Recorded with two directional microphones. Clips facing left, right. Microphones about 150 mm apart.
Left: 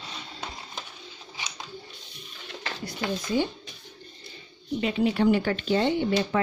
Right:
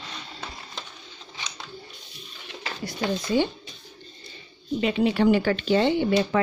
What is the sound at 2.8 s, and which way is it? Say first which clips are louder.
Speech: right 4 dB; 75° right (ahead or behind).